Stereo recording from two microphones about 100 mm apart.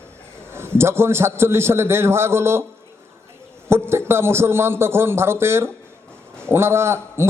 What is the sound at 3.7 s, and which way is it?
A man's voice, 25° right (ahead or behind).